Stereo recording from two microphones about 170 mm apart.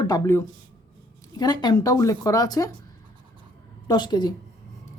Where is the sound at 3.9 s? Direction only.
25° left (ahead or behind).